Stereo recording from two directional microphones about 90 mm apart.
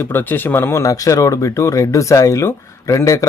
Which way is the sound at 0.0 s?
20° left (ahead or behind).